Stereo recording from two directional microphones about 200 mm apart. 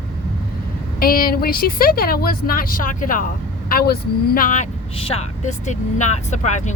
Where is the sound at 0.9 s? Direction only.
45° left (ahead or behind).